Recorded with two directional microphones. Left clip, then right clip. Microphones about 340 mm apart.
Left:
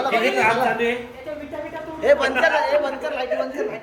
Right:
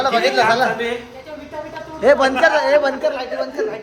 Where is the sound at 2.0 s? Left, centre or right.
Right.